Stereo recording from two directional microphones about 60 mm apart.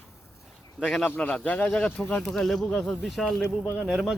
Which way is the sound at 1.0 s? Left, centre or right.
Left.